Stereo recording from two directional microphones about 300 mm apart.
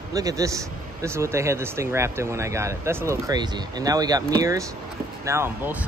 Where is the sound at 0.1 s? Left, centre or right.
Centre.